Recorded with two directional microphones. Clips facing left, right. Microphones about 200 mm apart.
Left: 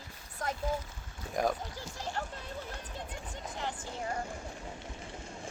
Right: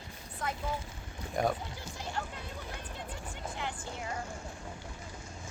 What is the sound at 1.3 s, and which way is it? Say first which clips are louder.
Speech: even; centre (ahead or behind).